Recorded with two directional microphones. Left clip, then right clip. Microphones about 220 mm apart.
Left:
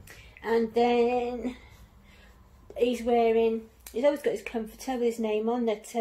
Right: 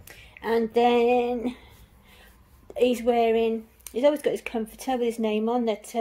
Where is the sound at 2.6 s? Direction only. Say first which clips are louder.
Right 5 dB; 50° right (ahead or behind).